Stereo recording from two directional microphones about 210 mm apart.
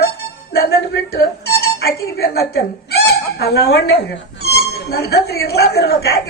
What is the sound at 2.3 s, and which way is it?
Speech, 50° left (ahead or behind).